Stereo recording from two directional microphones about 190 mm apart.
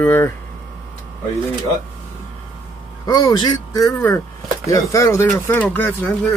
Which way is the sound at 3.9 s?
10° left (ahead or behind).